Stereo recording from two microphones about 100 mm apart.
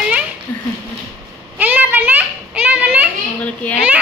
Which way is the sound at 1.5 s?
20° right (ahead or behind).